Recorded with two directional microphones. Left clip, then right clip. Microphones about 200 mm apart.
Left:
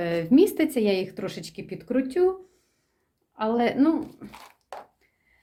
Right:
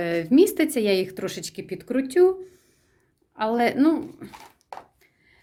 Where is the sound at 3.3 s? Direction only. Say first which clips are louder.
Right 2 dB; 30° right (ahead or behind).